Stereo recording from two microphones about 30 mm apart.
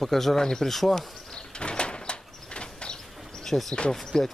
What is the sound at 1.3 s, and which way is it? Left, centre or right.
Sliding door, left.